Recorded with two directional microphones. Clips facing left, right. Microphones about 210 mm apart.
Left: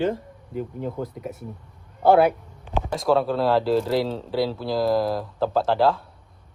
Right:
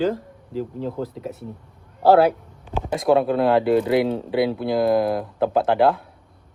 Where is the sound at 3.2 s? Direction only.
55° right (ahead or behind).